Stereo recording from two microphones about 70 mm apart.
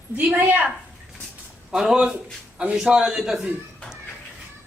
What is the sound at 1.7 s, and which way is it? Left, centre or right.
A man's voice, centre.